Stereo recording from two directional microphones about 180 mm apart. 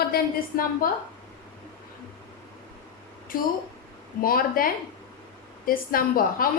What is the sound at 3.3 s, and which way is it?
A woman's voice, 50° left (ahead or behind).